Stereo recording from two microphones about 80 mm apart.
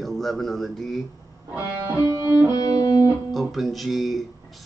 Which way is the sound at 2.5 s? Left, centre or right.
Left.